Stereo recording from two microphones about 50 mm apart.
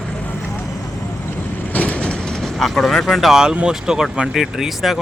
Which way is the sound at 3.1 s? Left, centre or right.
Centre.